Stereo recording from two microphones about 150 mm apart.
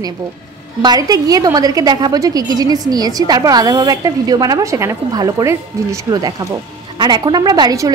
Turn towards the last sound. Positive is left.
turn(degrees=-25)  # may be behind; listen again after turning